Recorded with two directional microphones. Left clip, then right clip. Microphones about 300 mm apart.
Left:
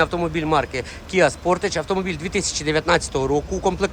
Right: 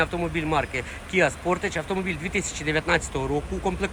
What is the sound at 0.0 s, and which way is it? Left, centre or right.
Speech, centre.